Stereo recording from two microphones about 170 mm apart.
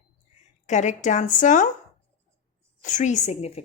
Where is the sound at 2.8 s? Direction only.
45° left (ahead or behind).